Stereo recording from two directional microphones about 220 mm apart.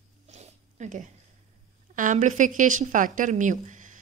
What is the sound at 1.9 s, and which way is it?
A woman's voice, 35° right (ahead or behind).